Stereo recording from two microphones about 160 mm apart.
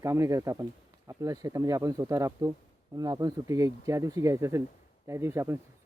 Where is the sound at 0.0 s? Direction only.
20° right (ahead or behind).